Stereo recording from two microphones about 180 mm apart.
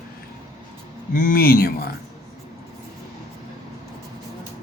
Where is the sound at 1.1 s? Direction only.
55° left (ahead or behind).